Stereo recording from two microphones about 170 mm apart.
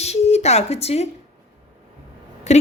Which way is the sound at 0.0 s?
40° left (ahead or behind).